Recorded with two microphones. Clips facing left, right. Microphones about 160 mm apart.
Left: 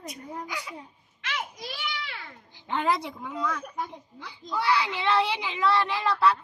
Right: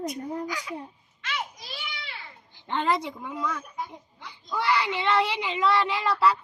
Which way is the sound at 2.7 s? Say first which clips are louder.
Right 1 dB; 5° left (ahead or behind).